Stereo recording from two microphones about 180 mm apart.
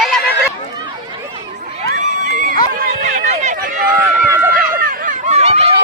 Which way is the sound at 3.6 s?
55° right (ahead or behind).